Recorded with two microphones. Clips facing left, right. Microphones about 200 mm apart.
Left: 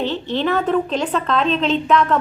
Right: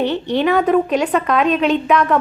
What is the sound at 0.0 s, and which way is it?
A woman's voice, 15° right (ahead or behind).